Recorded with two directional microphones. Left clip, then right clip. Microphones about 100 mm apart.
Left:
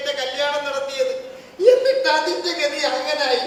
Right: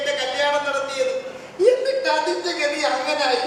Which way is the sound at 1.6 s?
55° right (ahead or behind).